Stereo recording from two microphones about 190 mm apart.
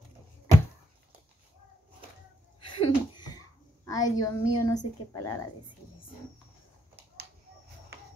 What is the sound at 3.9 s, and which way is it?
A woman's voice, 20° left (ahead or behind).